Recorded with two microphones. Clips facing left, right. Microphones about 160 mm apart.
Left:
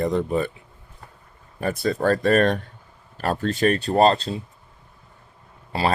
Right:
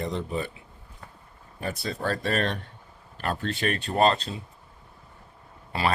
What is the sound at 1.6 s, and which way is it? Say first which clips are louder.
Speech: left 8 dB; 50° left (ahead or behind).